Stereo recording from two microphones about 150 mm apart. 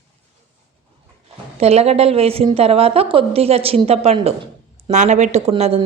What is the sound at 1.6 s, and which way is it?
A woman's voice, 45° right (ahead or behind).